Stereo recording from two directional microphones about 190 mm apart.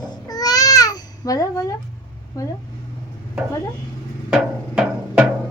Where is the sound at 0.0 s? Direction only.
20° left (ahead or behind).